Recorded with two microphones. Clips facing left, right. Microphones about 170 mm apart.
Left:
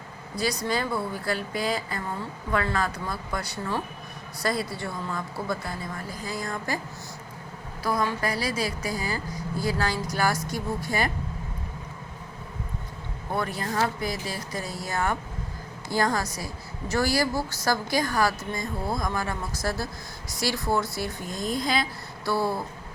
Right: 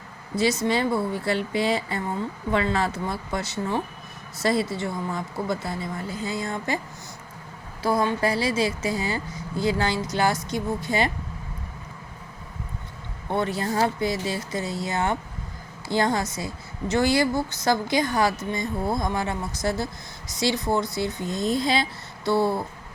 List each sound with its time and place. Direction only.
0.3 s a woman's voice: 25° right (ahead or behind)
7.8 s a woman's voice: 25° right (ahead or behind)
13.3 s a woman's voice: 25° right (ahead or behind)